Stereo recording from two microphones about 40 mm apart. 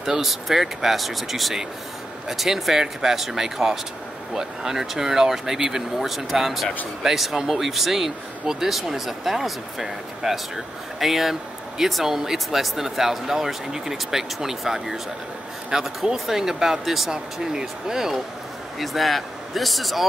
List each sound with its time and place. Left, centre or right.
0.0 s speech: centre
17.1 s speech: centre
18.8 s speech: centre